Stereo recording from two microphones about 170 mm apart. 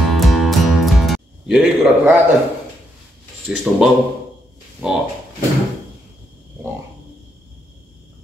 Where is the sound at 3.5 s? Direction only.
Centre (ahead or behind).